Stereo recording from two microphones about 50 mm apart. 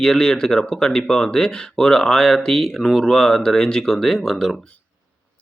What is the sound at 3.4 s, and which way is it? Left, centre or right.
Speech, centre.